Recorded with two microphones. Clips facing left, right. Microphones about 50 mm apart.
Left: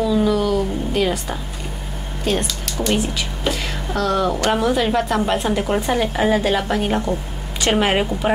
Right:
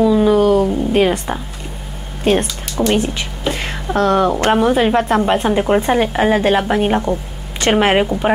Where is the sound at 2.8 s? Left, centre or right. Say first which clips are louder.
Right 5 dB; right.